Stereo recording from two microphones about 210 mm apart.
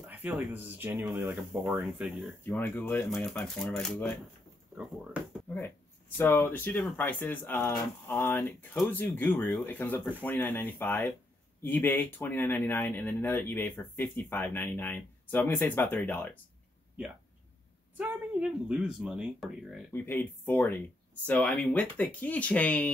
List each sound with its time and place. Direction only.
0.0 s speech: 5° right (ahead or behind)
2.4 s speech: 10° left (ahead or behind)
5.5 s speech: 10° left (ahead or behind)
17.9 s speech: 5° right (ahead or behind)
19.9 s speech: 10° left (ahead or behind)